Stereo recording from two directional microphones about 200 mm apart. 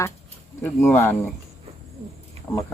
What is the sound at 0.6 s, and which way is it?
Speech, 10° left (ahead or behind).